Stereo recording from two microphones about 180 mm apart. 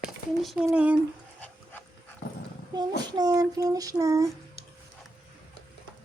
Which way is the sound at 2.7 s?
25° right (ahead or behind).